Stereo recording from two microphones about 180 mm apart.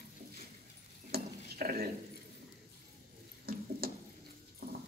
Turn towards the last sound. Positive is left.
turn(degrees=-60)  # may be behind; listen again after turning